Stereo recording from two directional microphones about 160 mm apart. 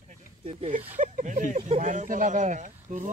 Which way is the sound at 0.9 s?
50° right (ahead or behind).